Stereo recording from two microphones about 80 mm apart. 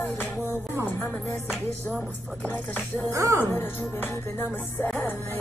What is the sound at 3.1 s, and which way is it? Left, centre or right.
Speech, right.